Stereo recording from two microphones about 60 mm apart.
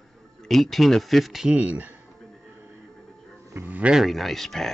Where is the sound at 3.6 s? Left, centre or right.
Right.